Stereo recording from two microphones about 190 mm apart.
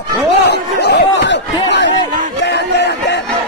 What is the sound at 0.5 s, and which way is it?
Chatter, 60° left (ahead or behind).